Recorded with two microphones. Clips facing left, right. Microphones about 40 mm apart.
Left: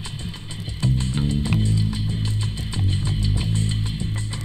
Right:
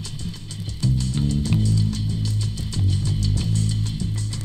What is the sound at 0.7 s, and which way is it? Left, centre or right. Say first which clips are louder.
Music: even; left.